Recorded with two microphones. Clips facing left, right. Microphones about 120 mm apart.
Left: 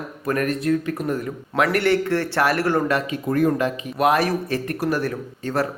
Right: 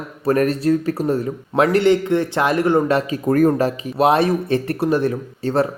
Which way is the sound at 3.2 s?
45° right (ahead or behind).